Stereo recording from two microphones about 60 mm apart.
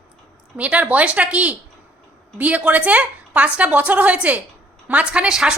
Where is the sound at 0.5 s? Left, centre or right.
Right.